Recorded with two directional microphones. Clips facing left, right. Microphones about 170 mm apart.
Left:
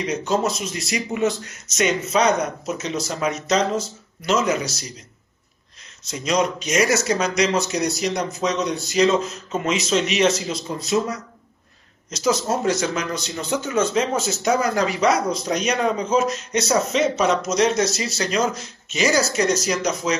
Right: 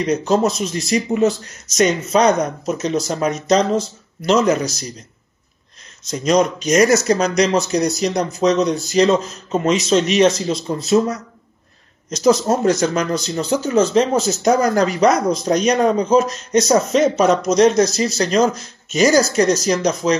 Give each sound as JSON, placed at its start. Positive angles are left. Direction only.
{"t": 0.0, "sound": "speech", "side_deg": -40}
{"t": 6.0, "sound": "speech", "side_deg": -40}
{"t": 12.2, "sound": "speech", "side_deg": -40}